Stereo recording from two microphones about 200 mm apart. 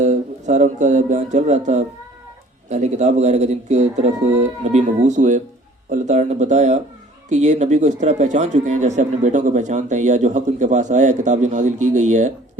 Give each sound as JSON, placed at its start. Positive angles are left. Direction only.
{"t": 0.0, "sound": "speech", "side_deg": -35}